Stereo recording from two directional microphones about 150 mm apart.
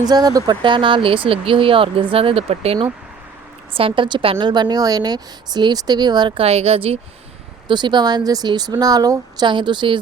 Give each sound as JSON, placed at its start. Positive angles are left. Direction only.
{"t": 0.0, "sound": "a woman's voice", "side_deg": -25}
{"t": 3.8, "sound": "a woman's voice", "side_deg": -35}
{"t": 7.7, "sound": "speech", "side_deg": -30}